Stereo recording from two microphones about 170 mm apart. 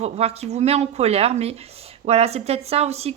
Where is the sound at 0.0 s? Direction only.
35° right (ahead or behind).